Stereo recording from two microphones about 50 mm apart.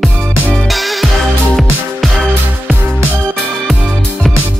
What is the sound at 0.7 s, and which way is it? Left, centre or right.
Music, centre.